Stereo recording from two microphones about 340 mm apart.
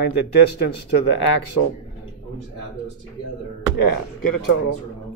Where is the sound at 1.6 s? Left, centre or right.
Left.